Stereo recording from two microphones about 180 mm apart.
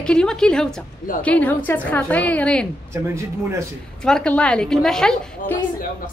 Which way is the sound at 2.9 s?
15° right (ahead or behind).